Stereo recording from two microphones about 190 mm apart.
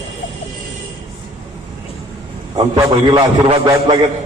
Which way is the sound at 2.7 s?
25° right (ahead or behind).